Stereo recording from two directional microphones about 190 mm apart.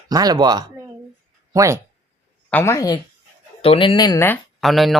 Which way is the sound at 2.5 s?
15° left (ahead or behind).